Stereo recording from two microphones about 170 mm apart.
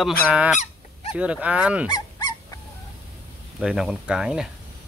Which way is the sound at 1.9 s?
25° left (ahead or behind).